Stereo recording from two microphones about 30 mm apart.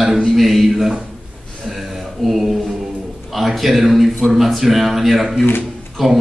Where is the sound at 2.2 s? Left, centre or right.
Centre.